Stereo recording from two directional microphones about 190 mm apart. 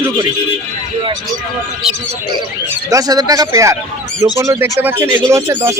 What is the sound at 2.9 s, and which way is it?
Speech, 20° right (ahead or behind).